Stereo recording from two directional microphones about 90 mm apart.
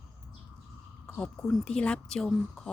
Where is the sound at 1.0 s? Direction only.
10° left (ahead or behind).